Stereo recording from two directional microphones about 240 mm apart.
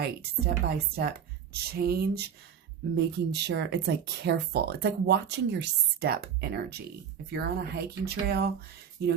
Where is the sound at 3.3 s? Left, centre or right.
Right.